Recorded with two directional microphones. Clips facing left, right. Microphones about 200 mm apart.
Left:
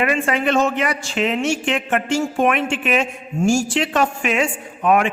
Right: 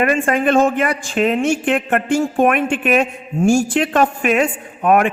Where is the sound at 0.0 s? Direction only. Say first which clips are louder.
Right 3 dB; 50° right (ahead or behind).